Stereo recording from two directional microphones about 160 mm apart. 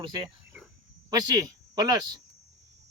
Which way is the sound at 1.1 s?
25° right (ahead or behind).